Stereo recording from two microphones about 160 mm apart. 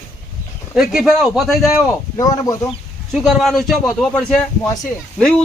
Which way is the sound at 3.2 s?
Centre (ahead or behind).